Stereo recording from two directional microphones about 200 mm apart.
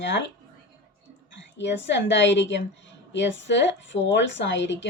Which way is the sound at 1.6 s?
65° left (ahead or behind).